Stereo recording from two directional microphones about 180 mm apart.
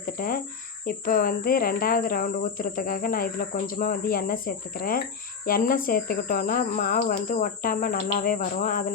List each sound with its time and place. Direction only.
0.0 s speech: 55° left (ahead or behind)